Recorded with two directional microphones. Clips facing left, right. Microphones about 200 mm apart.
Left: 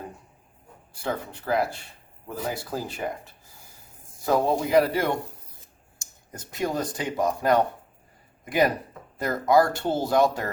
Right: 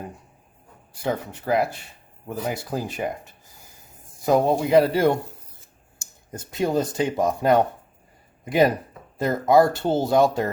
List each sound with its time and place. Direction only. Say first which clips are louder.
1.0 s speech: right 4 dB; 20° right (ahead or behind)
4.3 s speech: right 4 dB; 20° right (ahead or behind)
6.3 s speech: right 5 dB; 25° right (ahead or behind)